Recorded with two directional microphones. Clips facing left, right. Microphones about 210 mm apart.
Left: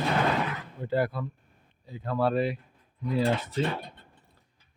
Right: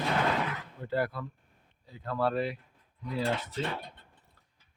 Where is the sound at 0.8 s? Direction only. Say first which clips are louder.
Left 4 dB; 20° left (ahead or behind).